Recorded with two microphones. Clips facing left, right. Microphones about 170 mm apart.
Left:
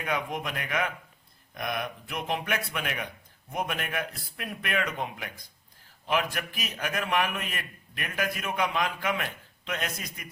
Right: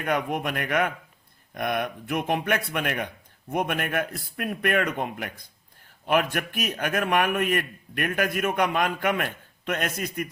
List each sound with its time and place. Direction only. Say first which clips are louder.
0.0 s a man's voice: right 5 dB; 55° right (ahead or behind)